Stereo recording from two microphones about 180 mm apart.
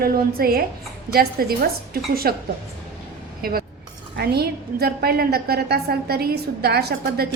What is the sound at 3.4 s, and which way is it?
A woman's voice, 55° right (ahead or behind).